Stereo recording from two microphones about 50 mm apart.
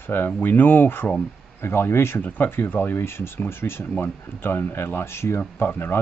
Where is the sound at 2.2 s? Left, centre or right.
Left.